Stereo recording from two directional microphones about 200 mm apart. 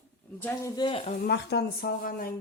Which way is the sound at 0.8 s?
25° left (ahead or behind).